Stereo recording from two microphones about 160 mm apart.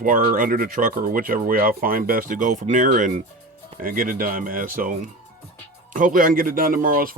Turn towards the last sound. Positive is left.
turn(degrees=-60)  # may be behind; listen again after turning